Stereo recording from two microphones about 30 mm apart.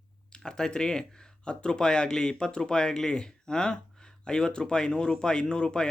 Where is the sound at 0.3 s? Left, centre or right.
Left.